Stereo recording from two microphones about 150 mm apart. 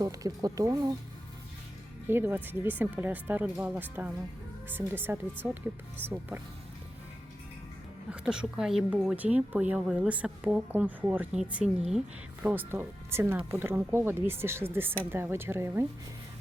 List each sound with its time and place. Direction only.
0.0 s speech: 25° right (ahead or behind)
2.0 s speech: 15° right (ahead or behind)
8.1 s speech: 5° right (ahead or behind)